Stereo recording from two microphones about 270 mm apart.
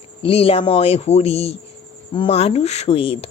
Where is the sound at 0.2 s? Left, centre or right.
Left.